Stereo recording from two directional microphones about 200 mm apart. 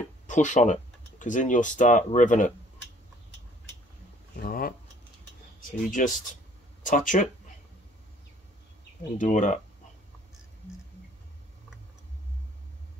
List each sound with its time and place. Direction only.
0.3 s speech: 40° left (ahead or behind)
4.4 s a sound: 45° left (ahead or behind)
5.9 s speech: 40° left (ahead or behind)
9.2 s speech: 35° left (ahead or behind)